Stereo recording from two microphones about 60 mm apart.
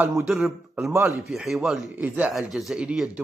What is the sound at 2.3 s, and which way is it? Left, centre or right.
Speech, centre.